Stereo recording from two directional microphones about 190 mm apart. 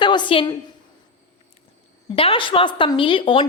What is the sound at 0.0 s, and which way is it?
Speech, 25° left (ahead or behind).